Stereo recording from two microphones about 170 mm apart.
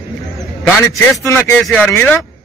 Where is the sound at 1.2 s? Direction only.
15° left (ahead or behind).